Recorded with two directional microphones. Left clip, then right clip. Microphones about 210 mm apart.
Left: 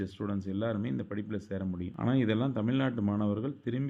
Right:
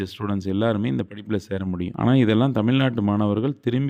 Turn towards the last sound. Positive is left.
turn(degrees=-45)  # may be behind; listen again after turning